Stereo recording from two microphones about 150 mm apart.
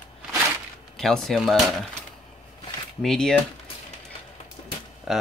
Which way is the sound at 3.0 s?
5° left (ahead or behind).